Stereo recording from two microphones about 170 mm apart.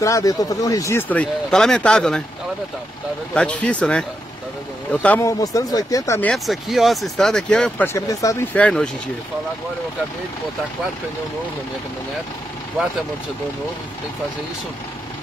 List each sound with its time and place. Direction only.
0.0 s speech: 20° left (ahead or behind); by 2.2 s 5° left (ahead or behind)
3.3 s speech: 10° left (ahead or behind)
5.0 s speech: 10° left (ahead or behind)
5.4 s speech: 20° left (ahead or behind)
6.3 s speech: centre (ahead or behind); by 8.5 s 20° left (ahead or behind)
8.5 s speech: 5° left (ahead or behind)